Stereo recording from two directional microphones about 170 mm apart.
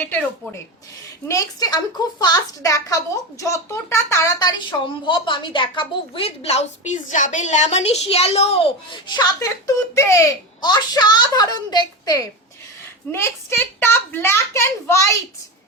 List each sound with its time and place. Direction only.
1.3 s a woman's voice: 20° left (ahead or behind); by 8.5 s 40° left (ahead or behind)
9.0 s a woman's voice: 20° left (ahead or behind)